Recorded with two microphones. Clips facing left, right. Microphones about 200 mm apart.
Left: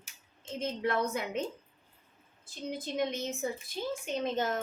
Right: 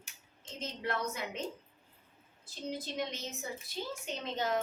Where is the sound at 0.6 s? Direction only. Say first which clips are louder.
Left 5 dB; 55° left (ahead or behind).